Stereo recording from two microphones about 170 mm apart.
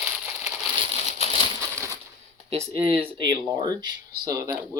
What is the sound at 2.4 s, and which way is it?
Speech, 35° right (ahead or behind).